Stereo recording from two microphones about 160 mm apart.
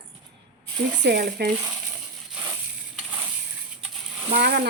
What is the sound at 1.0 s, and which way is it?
Speech, 85° right.